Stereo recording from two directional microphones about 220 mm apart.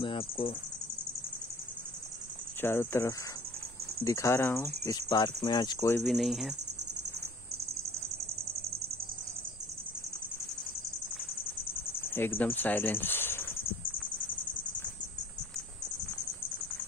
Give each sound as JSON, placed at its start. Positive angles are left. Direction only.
{"t": 0.0, "sound": "speech", "side_deg": 25}
{"t": 2.6, "sound": "speech", "side_deg": 10}
{"t": 6.0, "sound": "speech", "side_deg": 0}
{"t": 12.1, "sound": "speech", "side_deg": 10}